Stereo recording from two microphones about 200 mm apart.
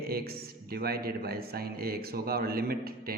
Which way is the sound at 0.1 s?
50° right (ahead or behind).